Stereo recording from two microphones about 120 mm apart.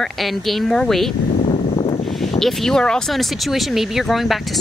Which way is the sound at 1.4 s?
55° left (ahead or behind).